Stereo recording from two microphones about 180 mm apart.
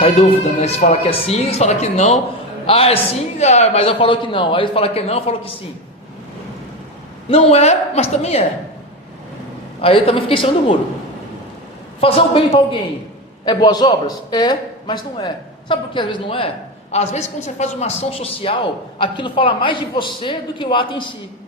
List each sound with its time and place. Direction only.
0.0 s speech: 30° left (ahead or behind)
7.3 s speech: 35° left (ahead or behind)
9.8 s speech: 30° left (ahead or behind)
11.9 s a man's voice: 30° left (ahead or behind)